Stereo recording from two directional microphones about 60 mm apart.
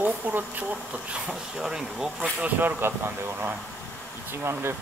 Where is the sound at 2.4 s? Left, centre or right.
Right.